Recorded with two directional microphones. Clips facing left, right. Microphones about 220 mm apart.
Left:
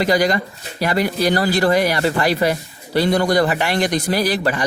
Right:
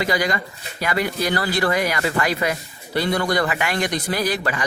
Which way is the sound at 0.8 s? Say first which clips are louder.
Left 4 dB; 35° left (ahead or behind).